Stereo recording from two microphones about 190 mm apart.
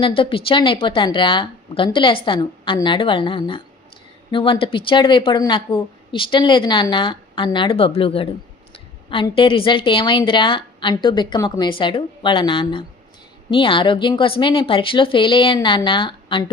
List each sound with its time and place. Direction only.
0.0 s a woman's voice: 30° left (ahead or behind)